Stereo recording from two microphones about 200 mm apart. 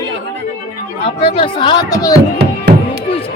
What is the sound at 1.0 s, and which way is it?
Speech, 25° left (ahead or behind).